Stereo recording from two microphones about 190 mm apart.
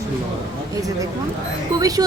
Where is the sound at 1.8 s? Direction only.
20° right (ahead or behind).